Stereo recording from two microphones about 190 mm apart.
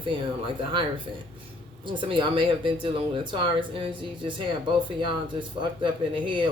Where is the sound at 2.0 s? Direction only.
25° right (ahead or behind).